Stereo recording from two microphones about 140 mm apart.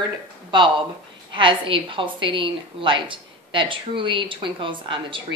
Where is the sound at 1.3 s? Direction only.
35° right (ahead or behind).